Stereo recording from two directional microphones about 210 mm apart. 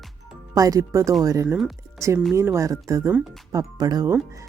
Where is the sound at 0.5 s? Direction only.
15° right (ahead or behind).